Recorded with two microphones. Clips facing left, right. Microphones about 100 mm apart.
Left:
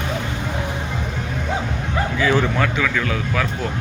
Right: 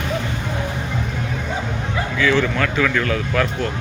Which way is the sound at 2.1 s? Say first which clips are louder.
Right 1 dB; 25° left (ahead or behind).